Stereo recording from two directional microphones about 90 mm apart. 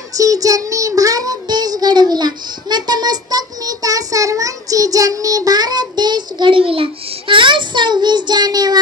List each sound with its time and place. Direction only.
0.1 s child singing: 40° right (ahead or behind)